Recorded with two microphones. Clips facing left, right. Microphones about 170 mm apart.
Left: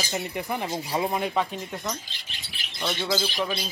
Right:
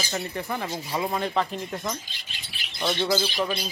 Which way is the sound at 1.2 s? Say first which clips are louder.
Even; 5° left (ahead or behind).